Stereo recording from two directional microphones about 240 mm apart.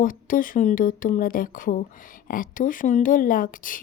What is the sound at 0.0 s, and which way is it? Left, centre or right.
A woman's voice, left.